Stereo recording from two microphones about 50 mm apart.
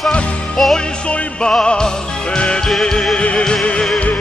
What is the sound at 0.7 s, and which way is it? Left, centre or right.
Music, centre.